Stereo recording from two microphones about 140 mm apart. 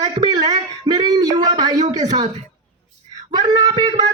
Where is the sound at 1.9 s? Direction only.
30° right (ahead or behind).